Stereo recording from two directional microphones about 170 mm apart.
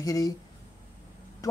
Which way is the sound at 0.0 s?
20° left (ahead or behind).